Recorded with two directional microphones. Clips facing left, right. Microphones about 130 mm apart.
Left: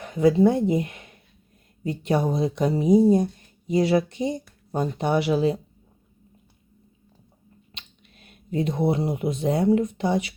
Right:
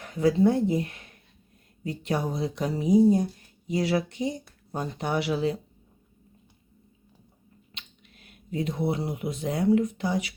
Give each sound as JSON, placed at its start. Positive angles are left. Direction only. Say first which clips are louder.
{"t": 0.0, "sound": "speech", "louder": "left 4 dB", "side_deg": 20}
{"t": 7.7, "sound": "finger snapping", "louder": "even", "side_deg": 25}
{"t": 8.9, "sound": "speech", "louder": "left 5 dB", "side_deg": 25}